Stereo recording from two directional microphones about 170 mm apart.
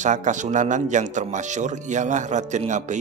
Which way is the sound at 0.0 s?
45° right (ahead or behind).